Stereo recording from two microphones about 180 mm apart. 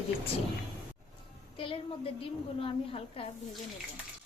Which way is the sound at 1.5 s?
30° left (ahead or behind).